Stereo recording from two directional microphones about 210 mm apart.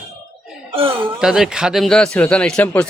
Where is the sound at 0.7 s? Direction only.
25° right (ahead or behind).